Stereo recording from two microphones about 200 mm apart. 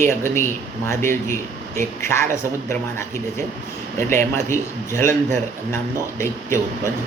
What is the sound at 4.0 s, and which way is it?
Speech, 40° right (ahead or behind).